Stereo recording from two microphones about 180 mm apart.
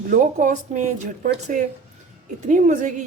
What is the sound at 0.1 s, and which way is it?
Speech, 45° right (ahead or behind).